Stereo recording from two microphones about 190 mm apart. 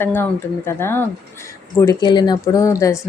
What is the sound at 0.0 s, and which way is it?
Speech, 10° left (ahead or behind).